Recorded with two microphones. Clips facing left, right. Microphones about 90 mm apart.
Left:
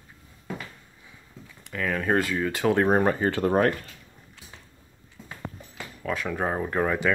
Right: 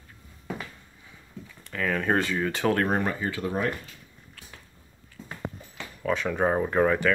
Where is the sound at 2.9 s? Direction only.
35° left (ahead or behind); by 3.9 s 55° left (ahead or behind).